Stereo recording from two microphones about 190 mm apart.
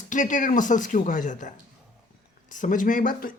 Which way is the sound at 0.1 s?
40° left (ahead or behind).